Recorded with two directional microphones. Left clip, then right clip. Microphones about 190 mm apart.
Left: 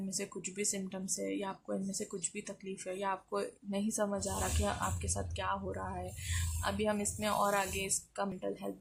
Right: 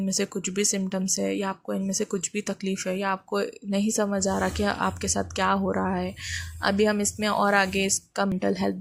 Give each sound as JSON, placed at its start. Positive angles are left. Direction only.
{"t": 0.1, "sound": "speech", "side_deg": -25}